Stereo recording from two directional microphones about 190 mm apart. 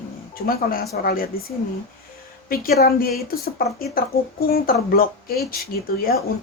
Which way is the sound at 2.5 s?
50° left (ahead or behind).